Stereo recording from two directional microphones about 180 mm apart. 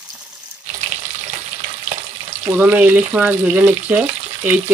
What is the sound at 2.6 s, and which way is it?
Speech, 10° right (ahead or behind).